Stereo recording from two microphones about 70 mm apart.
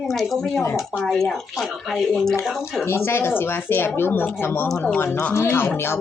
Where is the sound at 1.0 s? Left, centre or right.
Centre.